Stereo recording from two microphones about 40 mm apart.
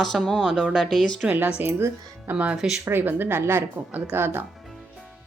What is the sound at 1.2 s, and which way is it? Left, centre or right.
Speech, right.